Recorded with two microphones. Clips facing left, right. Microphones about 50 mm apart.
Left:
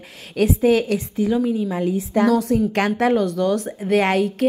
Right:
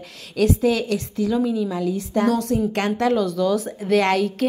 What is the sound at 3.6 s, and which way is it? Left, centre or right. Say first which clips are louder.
Speech: even; centre.